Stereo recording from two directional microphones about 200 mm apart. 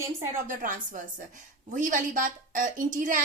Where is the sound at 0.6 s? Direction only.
40° right (ahead or behind).